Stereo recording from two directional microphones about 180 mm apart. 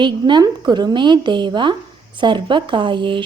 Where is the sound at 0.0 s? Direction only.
25° right (ahead or behind).